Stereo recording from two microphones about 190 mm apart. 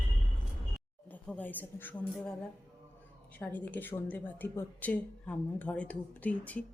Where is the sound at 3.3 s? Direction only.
10° left (ahead or behind).